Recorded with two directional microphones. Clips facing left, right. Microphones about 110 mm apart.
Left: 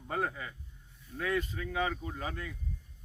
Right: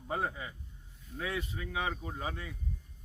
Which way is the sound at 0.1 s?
10° right (ahead or behind).